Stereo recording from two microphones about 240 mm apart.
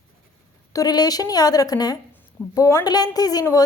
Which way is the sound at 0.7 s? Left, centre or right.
Centre.